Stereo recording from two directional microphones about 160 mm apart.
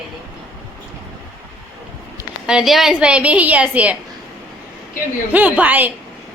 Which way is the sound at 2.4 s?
Centre (ahead or behind).